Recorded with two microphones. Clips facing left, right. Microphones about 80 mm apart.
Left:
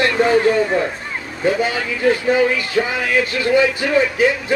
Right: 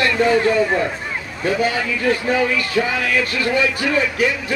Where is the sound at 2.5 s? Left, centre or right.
Left.